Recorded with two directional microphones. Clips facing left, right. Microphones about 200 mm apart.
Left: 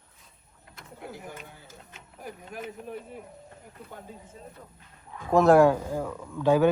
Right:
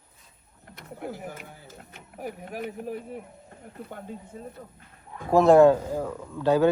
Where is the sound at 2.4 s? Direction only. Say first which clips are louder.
Right 4 dB; 60° right (ahead or behind).